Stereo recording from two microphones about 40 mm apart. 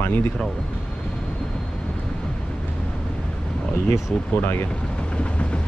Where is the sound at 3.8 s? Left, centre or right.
Left.